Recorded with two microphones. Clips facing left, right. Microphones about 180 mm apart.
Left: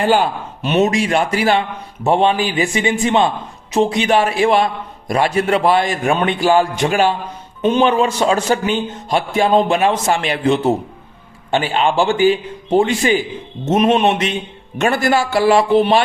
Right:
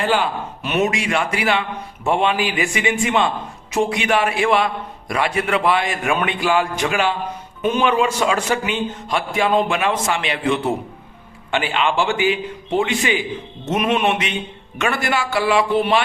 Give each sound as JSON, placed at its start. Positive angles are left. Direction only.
{"t": 0.0, "sound": "a man's voice", "side_deg": 45}
{"t": 0.6, "sound": "a man's voice", "side_deg": 30}
{"t": 14.8, "sound": "a man's voice", "side_deg": 40}